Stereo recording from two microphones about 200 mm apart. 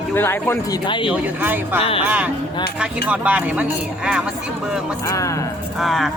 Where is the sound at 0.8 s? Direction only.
25° left (ahead or behind).